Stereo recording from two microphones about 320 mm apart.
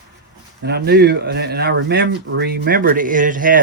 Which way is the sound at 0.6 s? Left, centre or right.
Right.